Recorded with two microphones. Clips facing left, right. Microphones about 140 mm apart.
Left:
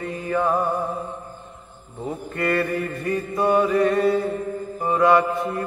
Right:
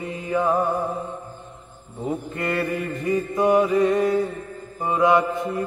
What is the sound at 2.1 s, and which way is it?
Mantra, 20° right (ahead or behind).